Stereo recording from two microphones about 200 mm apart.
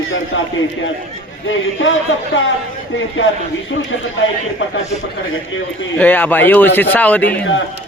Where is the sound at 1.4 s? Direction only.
70° left (ahead or behind).